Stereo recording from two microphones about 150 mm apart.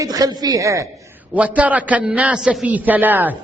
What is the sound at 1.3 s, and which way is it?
A man's voice, 10° right (ahead or behind).